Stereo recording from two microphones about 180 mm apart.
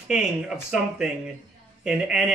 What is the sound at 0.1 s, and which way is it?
A woman's voice, 5° right (ahead or behind).